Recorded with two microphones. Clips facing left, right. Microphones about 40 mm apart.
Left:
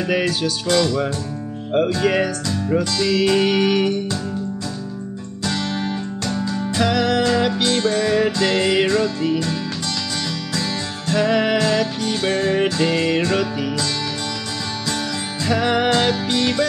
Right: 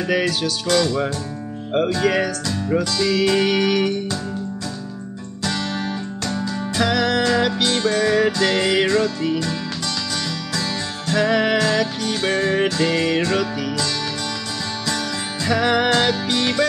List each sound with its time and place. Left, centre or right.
0.0 s music: centre
6.2 s music: centre
15.4 s music: centre